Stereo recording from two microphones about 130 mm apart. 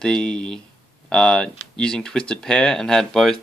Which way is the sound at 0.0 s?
5° left (ahead or behind).